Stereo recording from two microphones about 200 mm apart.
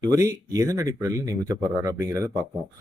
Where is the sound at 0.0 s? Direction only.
15° right (ahead or behind).